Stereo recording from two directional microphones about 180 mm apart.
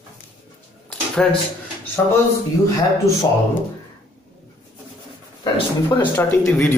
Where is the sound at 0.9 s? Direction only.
5° left (ahead or behind).